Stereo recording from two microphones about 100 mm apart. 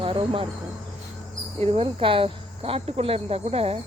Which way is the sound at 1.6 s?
70° right (ahead or behind).